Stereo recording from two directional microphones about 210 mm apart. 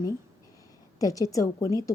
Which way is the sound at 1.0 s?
15° left (ahead or behind).